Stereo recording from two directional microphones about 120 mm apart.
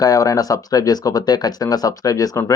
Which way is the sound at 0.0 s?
30° left (ahead or behind).